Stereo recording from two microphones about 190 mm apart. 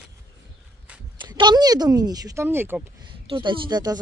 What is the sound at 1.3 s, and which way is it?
Speech, 20° right (ahead or behind).